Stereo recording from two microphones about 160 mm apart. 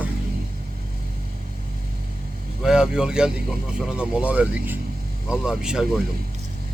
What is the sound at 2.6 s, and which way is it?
Speech, 5° right (ahead or behind).